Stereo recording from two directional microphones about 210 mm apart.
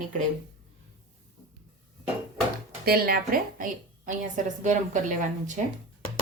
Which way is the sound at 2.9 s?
45° right (ahead or behind).